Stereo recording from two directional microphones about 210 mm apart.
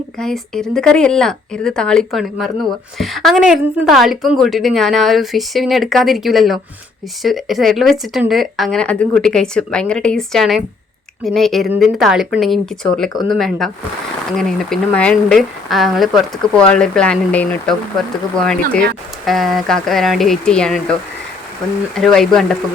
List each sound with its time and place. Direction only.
0.2 s speech: centre (ahead or behind)
21.9 s speech: centre (ahead or behind)